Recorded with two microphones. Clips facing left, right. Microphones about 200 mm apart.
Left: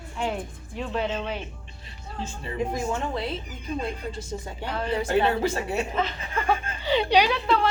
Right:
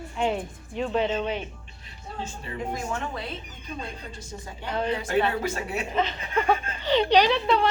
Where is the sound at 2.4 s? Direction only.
30° left (ahead or behind).